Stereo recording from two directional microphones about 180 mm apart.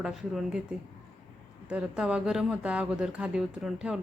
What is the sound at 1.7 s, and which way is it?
Speech, 5° right (ahead or behind).